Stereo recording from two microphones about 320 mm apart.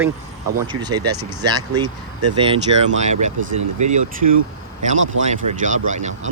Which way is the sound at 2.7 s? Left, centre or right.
Right.